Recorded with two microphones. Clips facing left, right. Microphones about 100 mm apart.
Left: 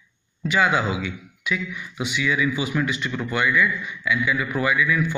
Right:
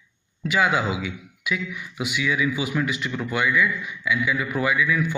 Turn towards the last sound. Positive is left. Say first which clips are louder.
# left 1 dB
turn(degrees=-5)  # may be behind; listen again after turning